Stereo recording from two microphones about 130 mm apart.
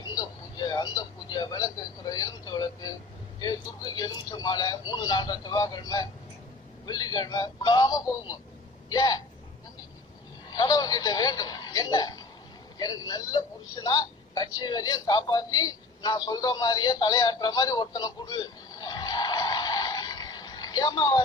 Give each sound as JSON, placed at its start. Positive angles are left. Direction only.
{"t": 0.0, "sound": "radio", "side_deg": 30}
{"t": 3.4, "sound": "speech", "side_deg": 30}
{"t": 10.5, "sound": "a man's voice", "side_deg": 30}